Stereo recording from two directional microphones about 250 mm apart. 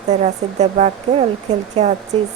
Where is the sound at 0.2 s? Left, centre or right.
Right.